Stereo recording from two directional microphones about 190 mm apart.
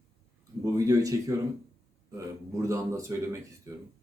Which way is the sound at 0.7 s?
20° right (ahead or behind).